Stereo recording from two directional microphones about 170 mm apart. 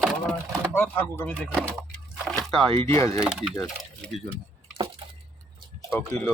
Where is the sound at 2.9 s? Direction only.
20° left (ahead or behind).